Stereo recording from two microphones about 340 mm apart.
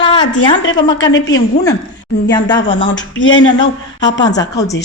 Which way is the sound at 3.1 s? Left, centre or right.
Left.